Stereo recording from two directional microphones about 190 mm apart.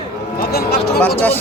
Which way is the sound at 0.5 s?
55° left (ahead or behind).